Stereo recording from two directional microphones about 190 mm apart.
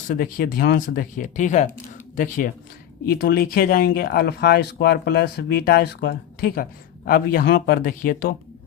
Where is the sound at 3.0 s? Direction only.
55° left (ahead or behind).